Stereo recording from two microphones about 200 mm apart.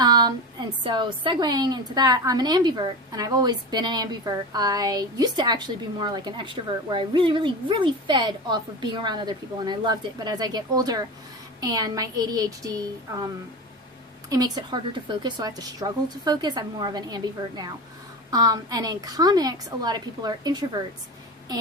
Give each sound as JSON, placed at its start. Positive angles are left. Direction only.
{"t": 0.0, "sound": "a woman's voice", "side_deg": -20}
{"t": 14.3, "sound": "a woman's voice", "side_deg": -20}